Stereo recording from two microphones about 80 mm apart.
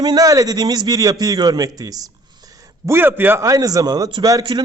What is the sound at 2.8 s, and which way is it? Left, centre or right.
Speech, right.